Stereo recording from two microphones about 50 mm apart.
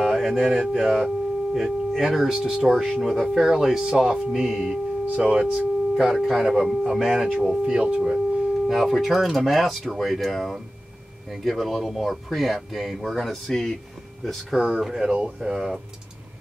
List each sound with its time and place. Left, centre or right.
0.0 s speech: centre
2.7 s speech: centre
3.0 s speech: centre
5.0 s speech: right
5.9 s speech: centre
8.6 s speech: centre
14.5 s speech: centre